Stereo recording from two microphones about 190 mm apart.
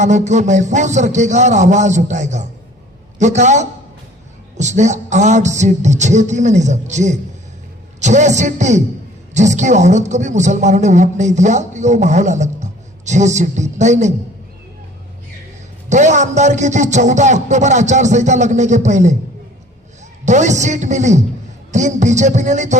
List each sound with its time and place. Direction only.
0.0 s a man's voice: 40° right (ahead or behind)
15.9 s a man's voice: 40° right (ahead or behind)
20.2 s a man's voice: 40° right (ahead or behind)